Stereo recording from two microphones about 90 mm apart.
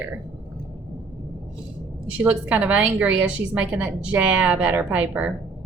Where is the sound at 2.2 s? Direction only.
15° right (ahead or behind).